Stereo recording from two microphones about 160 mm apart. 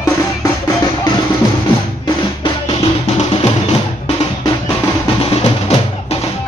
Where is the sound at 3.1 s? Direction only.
40° left (ahead or behind).